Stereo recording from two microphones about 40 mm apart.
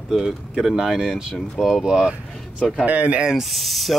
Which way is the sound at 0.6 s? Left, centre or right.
Centre.